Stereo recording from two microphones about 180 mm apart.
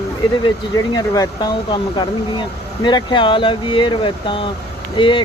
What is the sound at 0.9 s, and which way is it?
Speech, 20° left (ahead or behind).